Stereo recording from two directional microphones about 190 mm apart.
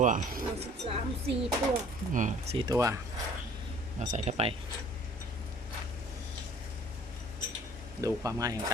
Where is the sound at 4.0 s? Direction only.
35° right (ahead or behind).